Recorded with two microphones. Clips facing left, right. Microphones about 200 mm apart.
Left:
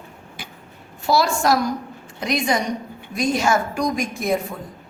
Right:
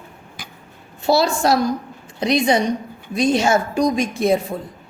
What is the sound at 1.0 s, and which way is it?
A woman's voice, 25° right (ahead or behind).